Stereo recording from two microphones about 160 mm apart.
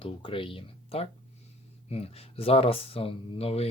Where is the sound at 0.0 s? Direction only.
35° left (ahead or behind).